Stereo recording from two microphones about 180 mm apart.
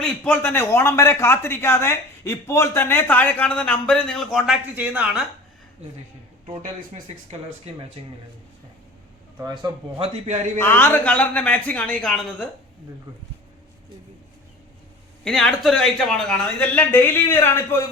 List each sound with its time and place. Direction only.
0.0 s a man's voice: 10° left (ahead or behind); by 5.2 s 5° right (ahead or behind)
7.7 s a man's voice: 35° right (ahead or behind)
10.0 s a man's voice: 40° right (ahead or behind)
10.6 s a man's voice: 10° left (ahead or behind)
15.2 s speech: 5° left (ahead or behind)